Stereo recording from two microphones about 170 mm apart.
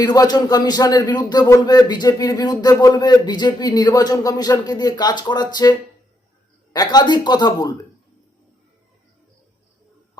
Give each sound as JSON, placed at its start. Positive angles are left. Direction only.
{"t": 0.0, "sound": "speech", "side_deg": 25}
{"t": 6.7, "sound": "speech", "side_deg": 25}